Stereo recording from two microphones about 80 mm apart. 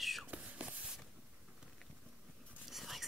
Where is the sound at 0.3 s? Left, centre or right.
Centre.